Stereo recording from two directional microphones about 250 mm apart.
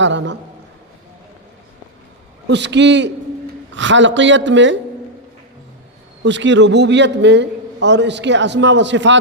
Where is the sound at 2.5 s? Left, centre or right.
Right.